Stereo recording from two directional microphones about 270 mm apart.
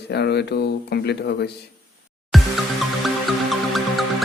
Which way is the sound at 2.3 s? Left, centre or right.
Centre.